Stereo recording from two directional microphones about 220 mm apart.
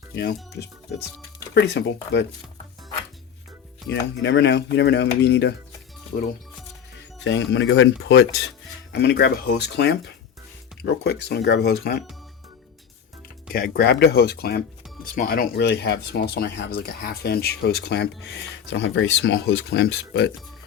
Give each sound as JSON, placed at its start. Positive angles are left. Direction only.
{"t": 0.1, "sound": "speech", "side_deg": 50}
{"t": 4.1, "sound": "speech", "side_deg": 50}
{"t": 7.5, "sound": "speech", "side_deg": 60}
{"t": 13.5, "sound": "speech", "side_deg": 45}